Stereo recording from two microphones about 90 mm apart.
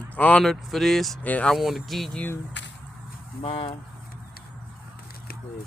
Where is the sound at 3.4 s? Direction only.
90° left.